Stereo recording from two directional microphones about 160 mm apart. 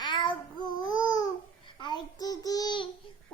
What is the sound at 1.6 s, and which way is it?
A child's voice, 30° left (ahead or behind).